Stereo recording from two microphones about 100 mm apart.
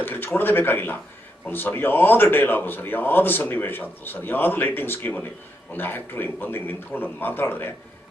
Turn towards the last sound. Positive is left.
turn(degrees=20)  # may be behind; listen again after turning